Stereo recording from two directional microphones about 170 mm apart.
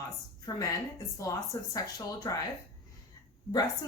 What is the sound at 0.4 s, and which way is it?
A woman's voice, 20° left (ahead or behind).